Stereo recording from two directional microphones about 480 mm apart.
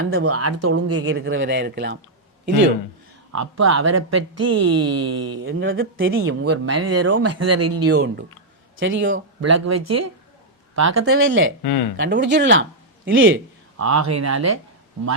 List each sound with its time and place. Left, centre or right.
0.0 s speech: right
3.3 s speech: right
11.6 s speech: left
11.9 s speech: right